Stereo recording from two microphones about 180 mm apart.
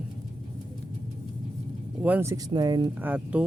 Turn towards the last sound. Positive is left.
turn(degrees=-10)  # may be behind; listen again after turning